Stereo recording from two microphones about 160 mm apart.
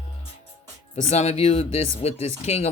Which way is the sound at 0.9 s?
40° left (ahead or behind).